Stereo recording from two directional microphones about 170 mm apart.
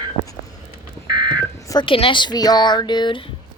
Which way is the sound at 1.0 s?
25° right (ahead or behind).